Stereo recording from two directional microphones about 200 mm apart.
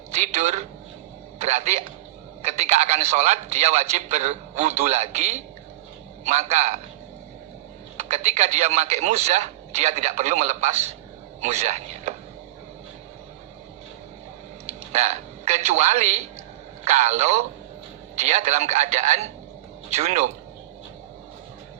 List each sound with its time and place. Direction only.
0.1 s speech: 35° right (ahead or behind)
7.9 s speech: 35° right (ahead or behind)
14.9 s a man's voice: 35° right (ahead or behind)